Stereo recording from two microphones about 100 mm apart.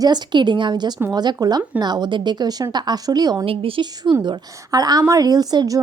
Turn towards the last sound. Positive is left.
turn(degrees=-40)  # may be behind; listen again after turning